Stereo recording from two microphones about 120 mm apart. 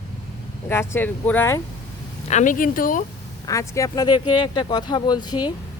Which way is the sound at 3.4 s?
25° left (ahead or behind).